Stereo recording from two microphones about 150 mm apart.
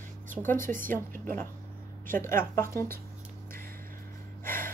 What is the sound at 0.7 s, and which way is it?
Speech, 65° right (ahead or behind).